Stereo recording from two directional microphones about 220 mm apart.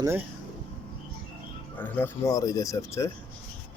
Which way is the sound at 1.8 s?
10° left (ahead or behind).